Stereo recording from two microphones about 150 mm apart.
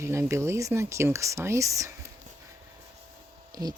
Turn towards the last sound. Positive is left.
turn(degrees=-25)  # may be behind; listen again after turning